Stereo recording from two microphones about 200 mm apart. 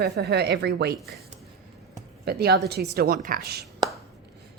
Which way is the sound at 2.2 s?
55° right (ahead or behind).